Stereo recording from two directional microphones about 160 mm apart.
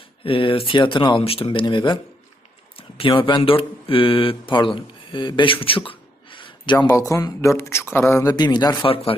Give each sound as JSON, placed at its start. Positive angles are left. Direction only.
{"t": 0.2, "sound": "speech", "side_deg": 35}
{"t": 6.8, "sound": "speech", "side_deg": 20}